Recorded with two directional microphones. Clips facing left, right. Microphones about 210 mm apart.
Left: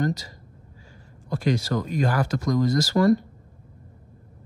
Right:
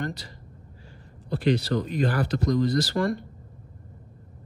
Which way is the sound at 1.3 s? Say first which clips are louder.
Right 1 dB; 45° left (ahead or behind).